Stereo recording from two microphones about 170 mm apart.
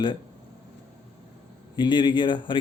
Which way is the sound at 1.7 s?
25° left (ahead or behind).